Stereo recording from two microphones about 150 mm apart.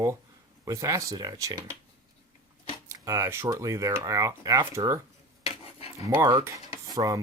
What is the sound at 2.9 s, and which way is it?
Speech, 20° right (ahead or behind).